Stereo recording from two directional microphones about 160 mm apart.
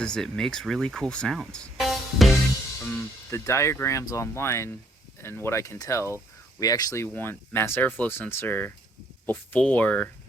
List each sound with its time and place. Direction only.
0.0 s speech: 5° left (ahead or behind)
3.2 s speech: 15° left (ahead or behind)